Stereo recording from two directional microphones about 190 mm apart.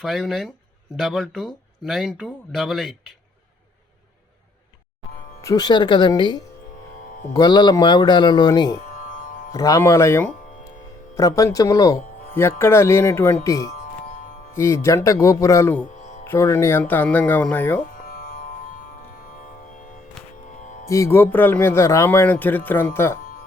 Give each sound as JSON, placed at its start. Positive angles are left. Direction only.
{"t": 0.0, "sound": "speech", "side_deg": 0}
{"t": 5.4, "sound": "speech", "side_deg": 20}
{"t": 9.0, "sound": "music", "side_deg": 45}
{"t": 9.5, "sound": "a man's voice", "side_deg": 20}
{"t": 16.0, "sound": "music", "side_deg": 40}
{"t": 16.2, "sound": "a man's voice", "side_deg": 15}
{"t": 17.9, "sound": "music", "side_deg": 50}
{"t": 20.8, "sound": "a man's voice", "side_deg": 15}